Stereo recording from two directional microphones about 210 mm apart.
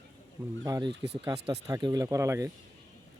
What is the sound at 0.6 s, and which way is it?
Speech, 20° right (ahead or behind).